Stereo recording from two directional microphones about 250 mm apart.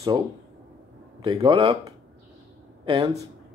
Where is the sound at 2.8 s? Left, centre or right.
Right.